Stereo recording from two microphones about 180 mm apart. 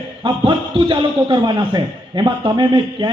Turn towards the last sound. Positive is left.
turn(degrees=-25)  # may be behind; listen again after turning